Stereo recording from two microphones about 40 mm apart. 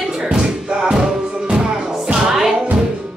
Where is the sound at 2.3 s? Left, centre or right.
Centre.